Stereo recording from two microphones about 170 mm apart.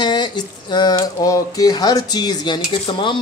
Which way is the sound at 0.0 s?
25° left (ahead or behind).